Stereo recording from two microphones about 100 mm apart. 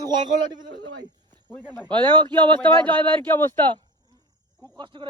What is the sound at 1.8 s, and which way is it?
Speech, 50° right (ahead or behind).